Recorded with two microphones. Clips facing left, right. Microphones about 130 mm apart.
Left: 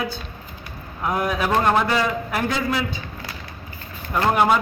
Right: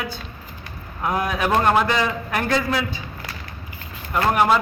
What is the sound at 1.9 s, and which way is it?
Speech, 5° left (ahead or behind).